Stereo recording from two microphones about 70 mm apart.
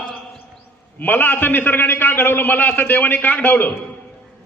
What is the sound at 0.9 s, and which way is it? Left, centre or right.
A man's voice, left.